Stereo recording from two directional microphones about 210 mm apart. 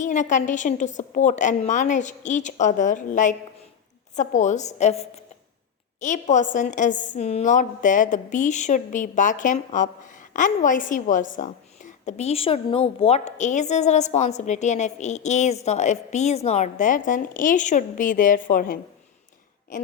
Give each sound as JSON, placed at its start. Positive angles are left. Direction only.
{"t": 0.0, "sound": "a woman's voice", "side_deg": 35}